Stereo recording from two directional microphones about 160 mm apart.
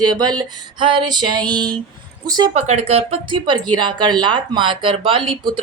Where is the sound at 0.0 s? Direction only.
25° right (ahead or behind).